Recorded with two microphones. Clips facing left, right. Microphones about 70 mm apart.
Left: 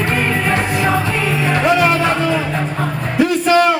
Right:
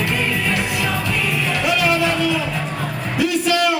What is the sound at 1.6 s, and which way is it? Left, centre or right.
Music, left.